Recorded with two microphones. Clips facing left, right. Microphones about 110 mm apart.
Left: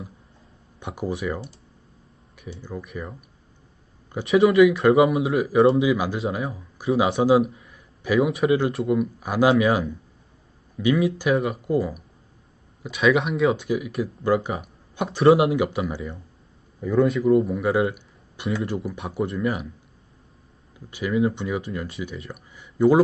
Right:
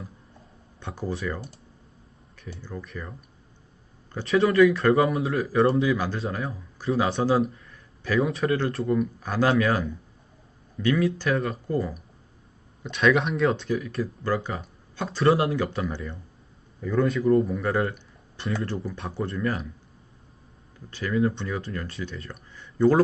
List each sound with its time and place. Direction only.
0.8 s speech: 15° left (ahead or behind)
2.6 s speech: 15° left (ahead or behind)
5.9 s speech: 15° left (ahead or behind)
7.5 s a sound: 10° left (ahead or behind)
8.2 s speech: 5° left (ahead or behind)
14.3 s speech: 20° left (ahead or behind)
15.2 s speech: 25° left (ahead or behind)
15.5 s speech: 10° left (ahead or behind)
17.1 s speech: centre (ahead or behind)
20.9 s speech: 10° left (ahead or behind)